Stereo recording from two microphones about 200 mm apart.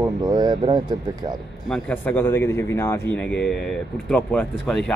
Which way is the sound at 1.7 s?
10° left (ahead or behind).